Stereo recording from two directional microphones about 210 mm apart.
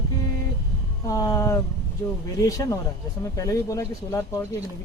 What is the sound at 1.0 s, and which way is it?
Speech, 15° left (ahead or behind).